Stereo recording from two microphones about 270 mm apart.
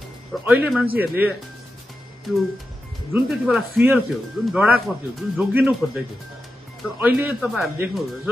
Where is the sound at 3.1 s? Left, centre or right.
Centre.